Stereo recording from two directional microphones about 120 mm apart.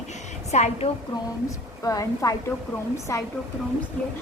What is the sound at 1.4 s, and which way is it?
A woman's voice, 30° left (ahead or behind).